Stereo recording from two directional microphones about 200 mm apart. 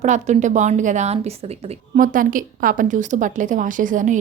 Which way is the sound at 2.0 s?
45° right (ahead or behind).